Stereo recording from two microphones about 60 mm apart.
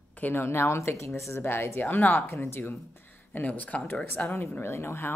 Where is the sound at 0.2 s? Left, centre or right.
Left.